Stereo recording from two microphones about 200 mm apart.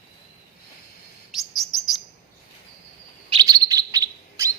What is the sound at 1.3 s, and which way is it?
Chirp, centre (ahead or behind).